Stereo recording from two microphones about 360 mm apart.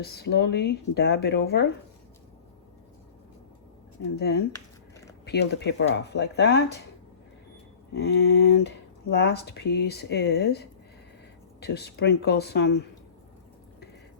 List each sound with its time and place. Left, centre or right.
0.0 s speech: left
4.2 s speech: left
7.9 s speech: left